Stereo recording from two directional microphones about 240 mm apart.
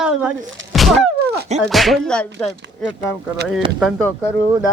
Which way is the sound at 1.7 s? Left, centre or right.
Centre.